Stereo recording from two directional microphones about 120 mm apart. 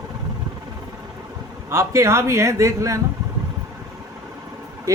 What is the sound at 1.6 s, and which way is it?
Speech, 25° right (ahead or behind).